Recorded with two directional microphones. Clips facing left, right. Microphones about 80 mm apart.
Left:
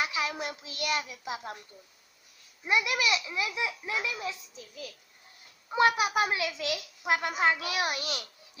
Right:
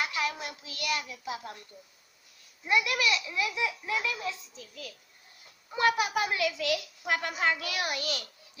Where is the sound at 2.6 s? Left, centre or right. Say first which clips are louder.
Even; centre.